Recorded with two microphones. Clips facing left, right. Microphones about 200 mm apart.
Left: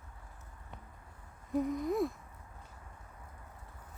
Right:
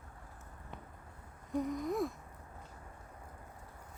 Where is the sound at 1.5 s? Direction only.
Centre (ahead or behind).